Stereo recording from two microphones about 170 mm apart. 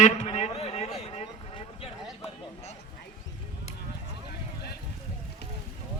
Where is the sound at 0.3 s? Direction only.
40° left (ahead or behind).